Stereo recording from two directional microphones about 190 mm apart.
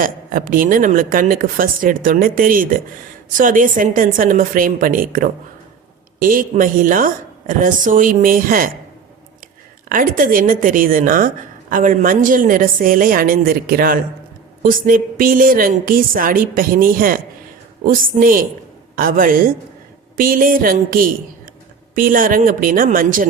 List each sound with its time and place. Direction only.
0.0 s a woman's voice: 45° right (ahead or behind)
9.9 s a woman's voice: 45° right (ahead or behind)